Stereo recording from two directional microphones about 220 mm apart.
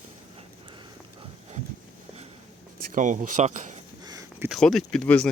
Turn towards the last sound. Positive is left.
turn(degrees=5)  # may be behind; listen again after turning